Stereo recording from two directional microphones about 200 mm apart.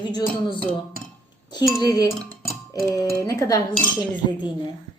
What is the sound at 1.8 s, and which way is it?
Speech, 20° left (ahead or behind).